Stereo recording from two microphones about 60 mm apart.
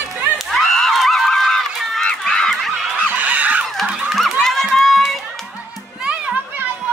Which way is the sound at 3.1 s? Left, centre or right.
Right.